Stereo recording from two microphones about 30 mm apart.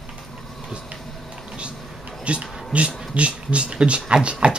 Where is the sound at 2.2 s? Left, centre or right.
Right.